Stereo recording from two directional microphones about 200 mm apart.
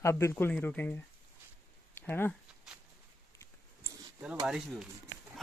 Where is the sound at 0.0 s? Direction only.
15° left (ahead or behind).